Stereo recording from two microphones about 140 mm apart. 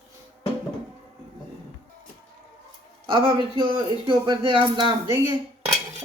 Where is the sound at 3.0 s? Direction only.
35° right (ahead or behind).